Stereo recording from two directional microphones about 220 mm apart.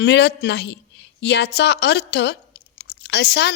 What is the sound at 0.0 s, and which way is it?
A woman's voice, 50° left (ahead or behind).